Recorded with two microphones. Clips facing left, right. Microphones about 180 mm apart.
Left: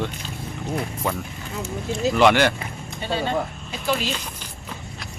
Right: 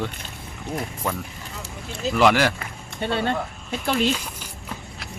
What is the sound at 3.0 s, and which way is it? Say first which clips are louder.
Speech: even; 60° right (ahead or behind).